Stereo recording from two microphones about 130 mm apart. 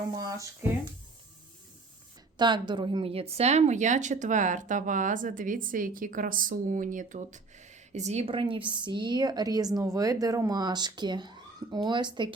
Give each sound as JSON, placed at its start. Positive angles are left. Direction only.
{"t": 0.2, "sound": "speech", "side_deg": -25}
{"t": 2.4, "sound": "a woman's voice", "side_deg": -35}
{"t": 8.3, "sound": "a woman's voice", "side_deg": -40}